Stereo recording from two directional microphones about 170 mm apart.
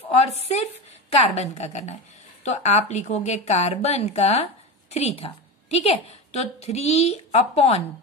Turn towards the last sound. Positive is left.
turn(degrees=40)  # may be behind; listen again after turning